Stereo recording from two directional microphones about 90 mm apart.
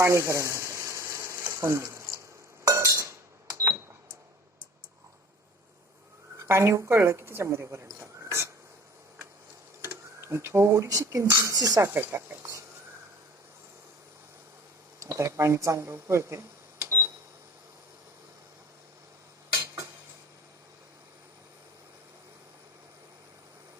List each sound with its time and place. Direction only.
0.0 s frying: 30° right (ahead or behind)
2.6 s cutlery: 35° right (ahead or behind)
6.4 s speech: 30° right (ahead or behind)
9.8 s speech: 30° right (ahead or behind)
11.5 s speech: 45° right (ahead or behind)
11.9 s speech: 25° right (ahead or behind)
14.9 s speech: 40° right (ahead or behind)
19.6 s a sound: 40° right (ahead or behind)